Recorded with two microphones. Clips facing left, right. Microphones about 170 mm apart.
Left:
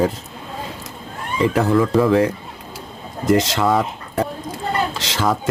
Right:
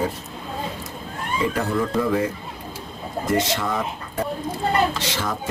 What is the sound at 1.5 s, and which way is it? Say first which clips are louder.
Speech: left 10 dB; 85° left.